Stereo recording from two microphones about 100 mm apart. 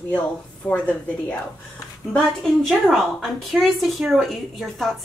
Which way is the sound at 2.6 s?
Centre (ahead or behind).